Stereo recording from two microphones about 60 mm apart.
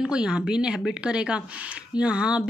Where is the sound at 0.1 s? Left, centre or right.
Centre.